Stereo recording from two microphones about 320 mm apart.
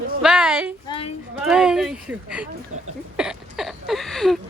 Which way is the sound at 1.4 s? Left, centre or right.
Centre.